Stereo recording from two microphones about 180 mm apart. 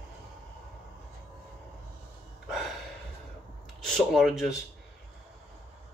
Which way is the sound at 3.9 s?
Centre (ahead or behind).